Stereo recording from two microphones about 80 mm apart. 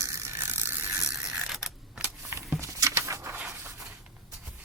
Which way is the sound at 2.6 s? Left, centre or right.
Right.